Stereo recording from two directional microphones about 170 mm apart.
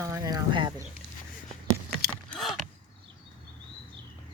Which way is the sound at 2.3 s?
Centre (ahead or behind).